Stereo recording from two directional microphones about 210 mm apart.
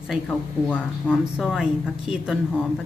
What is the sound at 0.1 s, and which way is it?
Speech, 5° left (ahead or behind).